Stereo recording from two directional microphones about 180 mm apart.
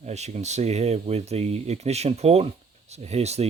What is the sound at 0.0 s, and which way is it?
Speech, 40° right (ahead or behind).